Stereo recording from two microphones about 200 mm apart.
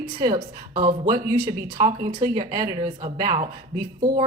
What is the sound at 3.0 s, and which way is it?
Speech, 25° right (ahead or behind).